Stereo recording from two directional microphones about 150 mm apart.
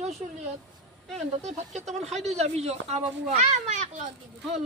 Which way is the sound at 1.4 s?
50° right (ahead or behind).